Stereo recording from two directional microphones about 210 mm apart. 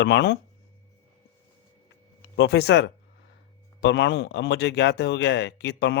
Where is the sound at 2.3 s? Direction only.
55° left (ahead or behind).